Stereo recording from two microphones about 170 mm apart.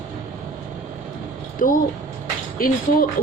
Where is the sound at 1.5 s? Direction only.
55° left (ahead or behind).